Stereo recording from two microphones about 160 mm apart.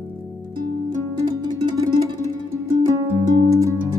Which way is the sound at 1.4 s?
25° right (ahead or behind).